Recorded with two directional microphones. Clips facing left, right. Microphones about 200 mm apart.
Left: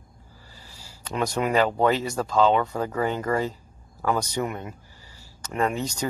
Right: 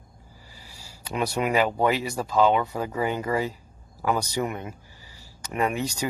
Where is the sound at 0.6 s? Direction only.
10° right (ahead or behind).